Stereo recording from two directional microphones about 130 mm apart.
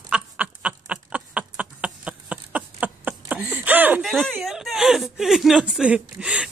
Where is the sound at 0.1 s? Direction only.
10° right (ahead or behind).